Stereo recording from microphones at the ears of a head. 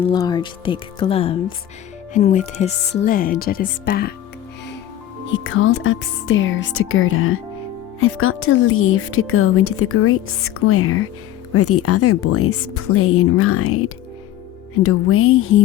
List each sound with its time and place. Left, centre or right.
0.0 s a woman's voice: left
5.3 s a woman's voice: left